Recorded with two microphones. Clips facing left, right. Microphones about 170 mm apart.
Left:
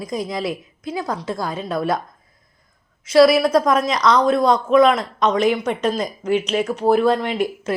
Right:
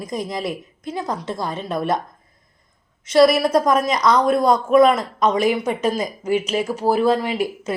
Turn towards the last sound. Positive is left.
turn(degrees=-5)  # may be behind; listen again after turning